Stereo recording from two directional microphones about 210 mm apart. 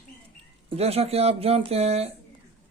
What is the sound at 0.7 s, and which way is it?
A man's voice, 30° right (ahead or behind).